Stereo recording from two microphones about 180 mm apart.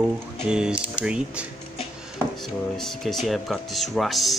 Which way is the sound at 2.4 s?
Centre (ahead or behind).